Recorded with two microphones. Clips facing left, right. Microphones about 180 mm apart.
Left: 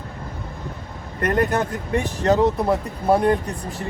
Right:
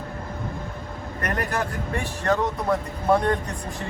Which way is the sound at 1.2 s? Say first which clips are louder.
Left 7 dB; 25° left (ahead or behind).